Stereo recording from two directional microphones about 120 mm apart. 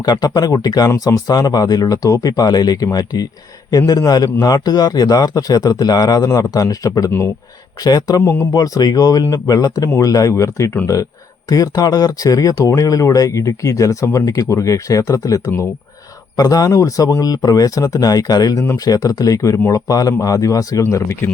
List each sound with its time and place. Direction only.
0.0 s a man's voice: 35° left (ahead or behind)
8.2 s speech: 20° left (ahead or behind)
8.5 s a man's voice: 30° left (ahead or behind)